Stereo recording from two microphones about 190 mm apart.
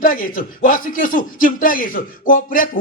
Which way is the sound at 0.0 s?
45° left (ahead or behind).